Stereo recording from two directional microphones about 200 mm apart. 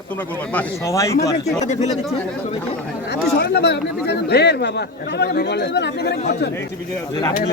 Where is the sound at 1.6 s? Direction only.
35° left (ahead or behind).